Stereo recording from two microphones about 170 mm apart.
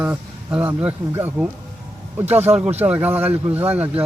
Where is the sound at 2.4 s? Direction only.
40° right (ahead or behind).